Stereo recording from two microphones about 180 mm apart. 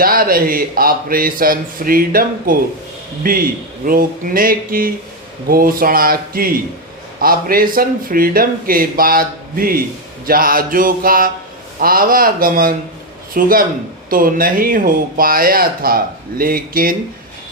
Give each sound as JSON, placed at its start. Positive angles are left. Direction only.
{"t": 0.0, "sound": "speech", "side_deg": -55}